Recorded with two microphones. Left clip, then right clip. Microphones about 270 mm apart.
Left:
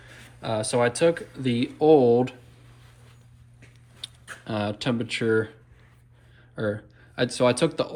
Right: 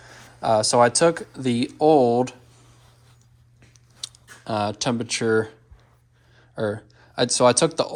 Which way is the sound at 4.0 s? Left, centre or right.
Centre.